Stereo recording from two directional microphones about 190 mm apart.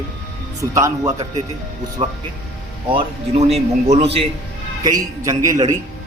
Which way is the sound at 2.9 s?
30° right (ahead or behind).